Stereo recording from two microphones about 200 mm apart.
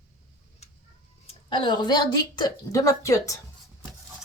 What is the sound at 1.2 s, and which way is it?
Speech, 25° left (ahead or behind).